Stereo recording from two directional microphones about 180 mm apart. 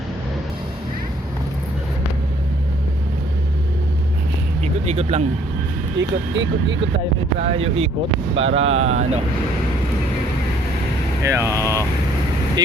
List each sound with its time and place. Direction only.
4.6 s music: 35° right (ahead or behind)
6.0 s speech: 90° right
7.3 s speech: 35° right (ahead or behind)
11.2 s speech: 15° right (ahead or behind)
11.6 s speech: 15° left (ahead or behind)